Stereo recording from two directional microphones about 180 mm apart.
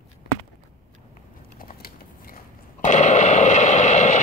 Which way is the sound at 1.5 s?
55° left (ahead or behind).